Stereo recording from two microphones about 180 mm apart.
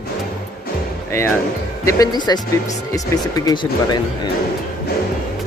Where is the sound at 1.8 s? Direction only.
20° left (ahead or behind).